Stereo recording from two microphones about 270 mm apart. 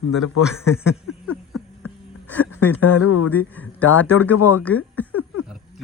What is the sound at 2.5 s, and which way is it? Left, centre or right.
Speech, left.